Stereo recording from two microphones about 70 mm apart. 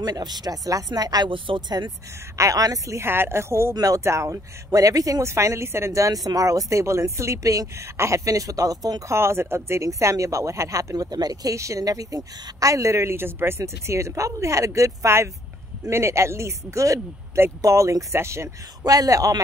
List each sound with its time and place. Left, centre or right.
0.0 s speech: right
2.3 s speech: right
3.0 s speech: right
3.7 s speech: right
4.0 s speech: right
5.2 s speech: right
9.1 s speech: right
9.8 s speech: right
11.5 s speech: right
18.9 s speech: right